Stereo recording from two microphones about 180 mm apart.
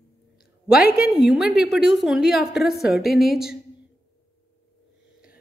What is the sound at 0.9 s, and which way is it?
A woman's voice, centre (ahead or behind).